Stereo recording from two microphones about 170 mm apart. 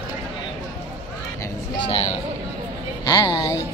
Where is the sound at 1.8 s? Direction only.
35° left (ahead or behind).